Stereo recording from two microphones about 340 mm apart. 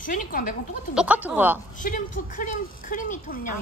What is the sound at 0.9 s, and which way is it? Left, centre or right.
Speech, centre.